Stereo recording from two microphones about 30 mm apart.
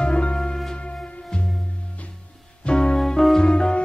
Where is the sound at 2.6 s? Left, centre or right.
Left.